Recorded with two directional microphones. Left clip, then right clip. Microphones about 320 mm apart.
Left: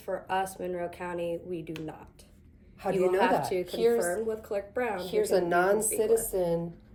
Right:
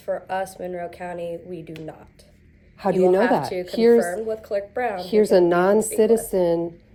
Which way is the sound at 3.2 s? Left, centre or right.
Centre.